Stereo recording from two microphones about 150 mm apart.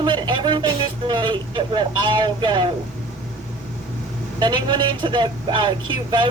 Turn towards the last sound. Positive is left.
turn(degrees=-30)  # may be behind; listen again after turning